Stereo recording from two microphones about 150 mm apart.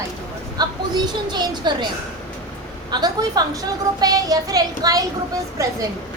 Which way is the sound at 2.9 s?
25° right (ahead or behind).